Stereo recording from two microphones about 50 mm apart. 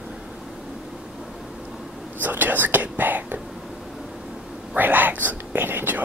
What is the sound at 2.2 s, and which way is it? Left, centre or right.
Whispering, right.